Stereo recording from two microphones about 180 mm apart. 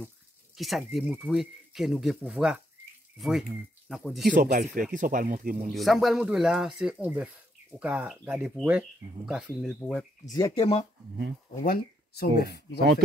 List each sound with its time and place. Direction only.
0.6 s speech: centre (ahead or behind)
4.3 s speech: 55° right (ahead or behind)
5.7 s speech: centre (ahead or behind)
10.3 s speech: 25° left (ahead or behind)
11.6 s speech: 60° left (ahead or behind)